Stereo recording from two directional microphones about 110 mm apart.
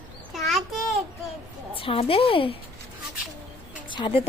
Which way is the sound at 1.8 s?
55° left (ahead or behind).